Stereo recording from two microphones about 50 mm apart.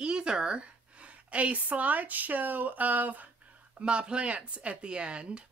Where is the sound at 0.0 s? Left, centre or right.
Centre; by 3.3 s right.